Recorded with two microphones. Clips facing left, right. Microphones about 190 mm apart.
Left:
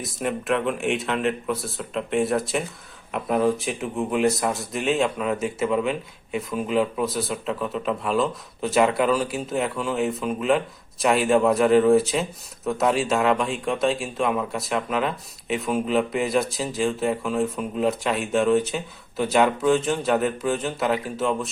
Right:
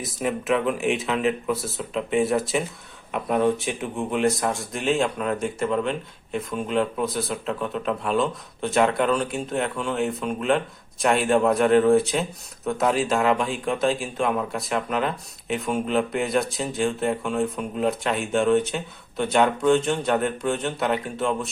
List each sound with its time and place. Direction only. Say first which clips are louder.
0.0 s a man's voice: right 1 dB; centre (ahead or behind)